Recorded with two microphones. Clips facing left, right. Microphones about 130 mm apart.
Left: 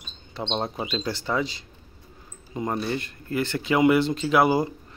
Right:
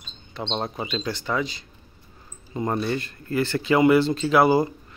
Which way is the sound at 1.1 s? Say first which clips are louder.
Even; 25° left (ahead or behind).